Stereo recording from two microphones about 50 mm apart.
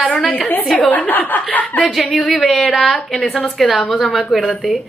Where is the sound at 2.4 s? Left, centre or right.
Centre.